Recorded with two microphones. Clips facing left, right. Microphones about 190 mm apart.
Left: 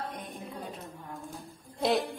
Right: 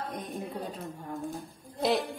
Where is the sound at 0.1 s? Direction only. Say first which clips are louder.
Right 4 dB; 40° right (ahead or behind).